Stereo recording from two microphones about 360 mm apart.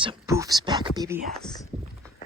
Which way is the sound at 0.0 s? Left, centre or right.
Centre.